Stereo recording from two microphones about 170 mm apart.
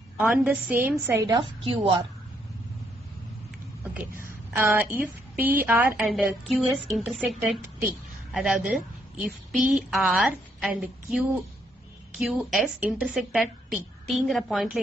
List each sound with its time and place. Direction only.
0.2 s a woman's voice: 10° right (ahead or behind)
1.3 s a woman's voice: 30° right (ahead or behind)
4.2 s a woman's voice: 15° right (ahead or behind)